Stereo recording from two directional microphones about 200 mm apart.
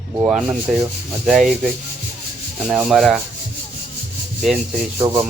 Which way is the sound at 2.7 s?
Centre (ahead or behind).